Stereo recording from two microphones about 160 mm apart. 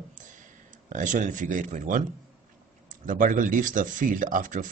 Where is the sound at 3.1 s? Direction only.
55° right (ahead or behind).